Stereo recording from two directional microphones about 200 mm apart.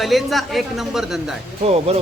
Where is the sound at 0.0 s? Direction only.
Centre (ahead or behind).